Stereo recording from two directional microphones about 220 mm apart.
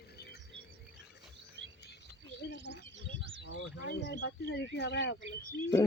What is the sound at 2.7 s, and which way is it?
Bird, 55° left (ahead or behind).